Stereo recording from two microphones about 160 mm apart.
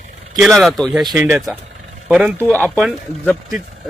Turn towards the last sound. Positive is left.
turn(degrees=0)  # may be behind; listen again after turning